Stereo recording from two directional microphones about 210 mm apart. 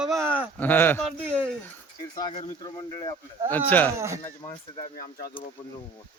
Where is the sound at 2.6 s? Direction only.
20° left (ahead or behind).